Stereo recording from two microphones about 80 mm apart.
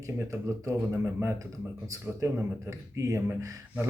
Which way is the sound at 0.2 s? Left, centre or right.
Right.